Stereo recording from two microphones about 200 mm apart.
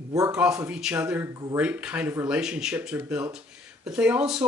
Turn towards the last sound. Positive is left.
turn(degrees=-5)  # may be behind; listen again after turning